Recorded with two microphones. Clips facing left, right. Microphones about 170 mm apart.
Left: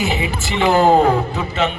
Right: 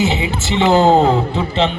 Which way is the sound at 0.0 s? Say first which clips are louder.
Right 3 dB; 20° right (ahead or behind).